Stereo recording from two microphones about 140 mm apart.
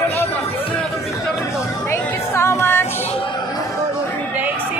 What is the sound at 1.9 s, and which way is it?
Music, 20° left (ahead or behind).